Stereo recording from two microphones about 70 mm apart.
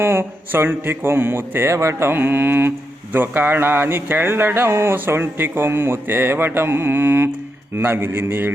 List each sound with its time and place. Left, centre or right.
0.0 s speech: right
2.1 s speech: right